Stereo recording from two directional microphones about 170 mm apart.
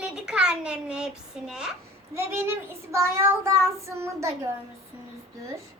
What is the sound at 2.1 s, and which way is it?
Child singing, 15° right (ahead or behind).